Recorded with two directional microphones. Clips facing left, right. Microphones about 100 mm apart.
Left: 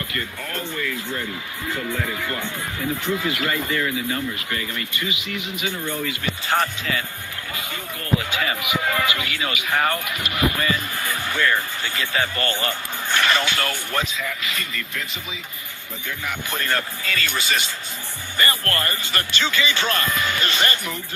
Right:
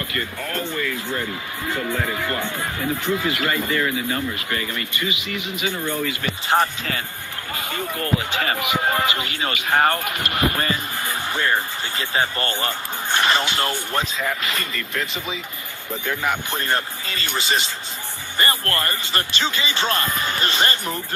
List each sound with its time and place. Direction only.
1.9 s speech: 50° right (ahead or behind)
6.5 s speech: 30° right (ahead or behind)
7.5 s speech: 45° right (ahead or behind)
8.7 s speech: 35° right (ahead or behind)
11.0 s speech: 25° right (ahead or behind)
14.1 s speech: 40° right (ahead or behind)
16.0 s speech: 50° right (ahead or behind)
16.5 s speech: 25° right (ahead or behind)